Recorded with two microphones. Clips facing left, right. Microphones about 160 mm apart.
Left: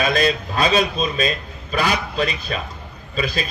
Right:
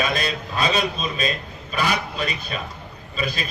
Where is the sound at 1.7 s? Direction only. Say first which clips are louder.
Left 3 dB; 35° left (ahead or behind).